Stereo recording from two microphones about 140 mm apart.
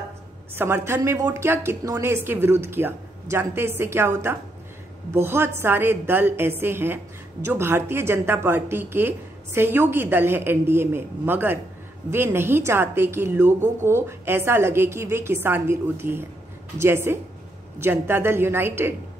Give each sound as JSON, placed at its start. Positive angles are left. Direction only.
{"t": 0.6, "sound": "a woman's voice", "side_deg": -15}